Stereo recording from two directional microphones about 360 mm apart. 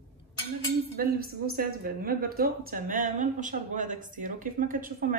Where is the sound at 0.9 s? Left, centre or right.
Right.